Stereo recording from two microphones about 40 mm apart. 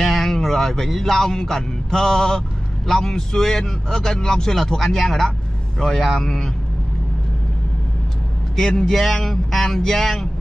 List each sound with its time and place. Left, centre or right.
0.0 s music: centre
2.9 s speech: centre
8.5 s speech: centre